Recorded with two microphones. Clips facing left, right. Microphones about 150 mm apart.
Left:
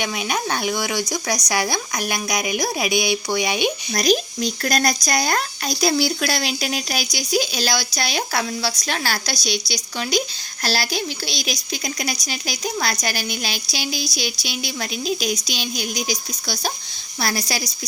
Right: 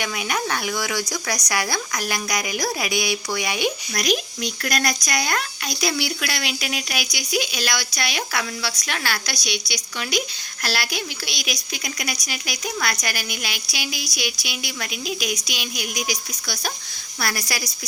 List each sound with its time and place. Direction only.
0.0 s speech: 20° left (ahead or behind)